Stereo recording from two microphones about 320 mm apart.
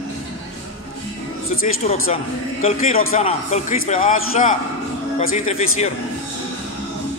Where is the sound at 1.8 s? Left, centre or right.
Centre.